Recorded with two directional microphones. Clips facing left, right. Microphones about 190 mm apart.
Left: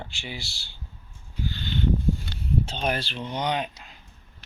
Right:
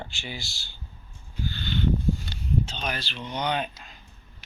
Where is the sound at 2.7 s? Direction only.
50° left (ahead or behind).